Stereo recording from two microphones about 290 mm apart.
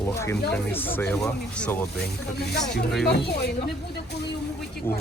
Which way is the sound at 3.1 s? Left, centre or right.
Left.